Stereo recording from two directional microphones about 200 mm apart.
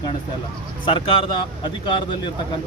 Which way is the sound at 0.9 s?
25° left (ahead or behind).